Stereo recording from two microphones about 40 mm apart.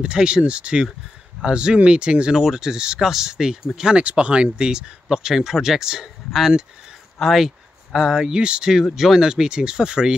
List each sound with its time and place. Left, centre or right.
0.0 s speech: right
2.3 s speech: centre
4.0 s speech: right; by 6.0 s centre
7.2 s speech: centre
7.4 s speech: centre
8.9 s speech: centre